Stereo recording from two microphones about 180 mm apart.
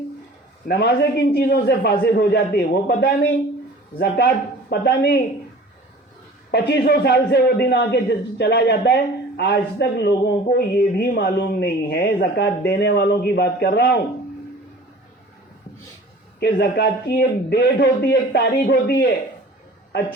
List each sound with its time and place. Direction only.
0.7 s a man's voice: 65° left (ahead or behind)
6.5 s a man's voice: 65° left (ahead or behind)
16.4 s speech: 65° left (ahead or behind)